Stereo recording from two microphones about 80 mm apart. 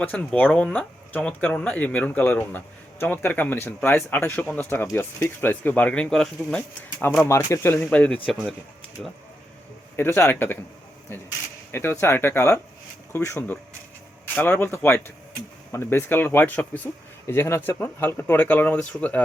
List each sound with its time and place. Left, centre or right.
0.0 s speech: centre
7.3 s speech: left
7.9 s speech: centre
10.0 s speech: left
14.3 s speech: left
17.2 s speech: left; by 19.2 s centre